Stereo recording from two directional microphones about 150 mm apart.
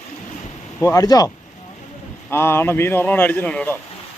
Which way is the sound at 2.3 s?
15° left (ahead or behind).